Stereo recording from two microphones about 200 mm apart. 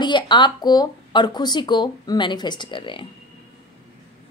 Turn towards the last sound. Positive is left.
turn(degrees=25)  # may be behind; listen again after turning